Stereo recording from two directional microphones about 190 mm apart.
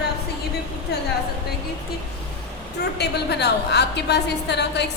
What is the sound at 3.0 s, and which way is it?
A woman's voice, 60° left (ahead or behind).